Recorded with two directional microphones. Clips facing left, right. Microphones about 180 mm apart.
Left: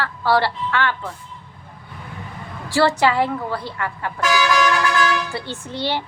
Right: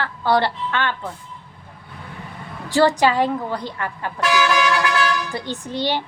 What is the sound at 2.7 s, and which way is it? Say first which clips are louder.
A woman's voice: right 1 dB; 15° right (ahead or behind).